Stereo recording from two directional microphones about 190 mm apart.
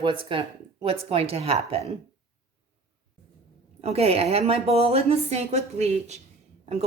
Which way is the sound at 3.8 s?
35° right (ahead or behind).